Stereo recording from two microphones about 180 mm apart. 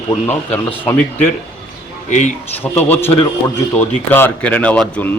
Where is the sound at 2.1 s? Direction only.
45° left (ahead or behind).